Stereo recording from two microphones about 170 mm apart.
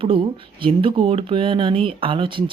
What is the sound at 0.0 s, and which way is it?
Speech, 30° right (ahead or behind).